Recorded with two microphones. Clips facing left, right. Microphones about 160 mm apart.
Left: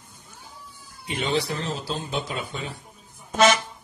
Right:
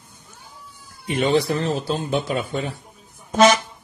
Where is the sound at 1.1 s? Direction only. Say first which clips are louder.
Right 7 dB; 55° right (ahead or behind).